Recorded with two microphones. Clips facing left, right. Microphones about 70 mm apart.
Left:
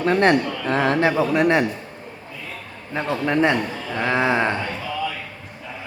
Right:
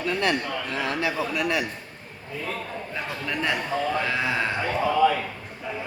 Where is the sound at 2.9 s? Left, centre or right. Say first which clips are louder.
Left 11 dB; left.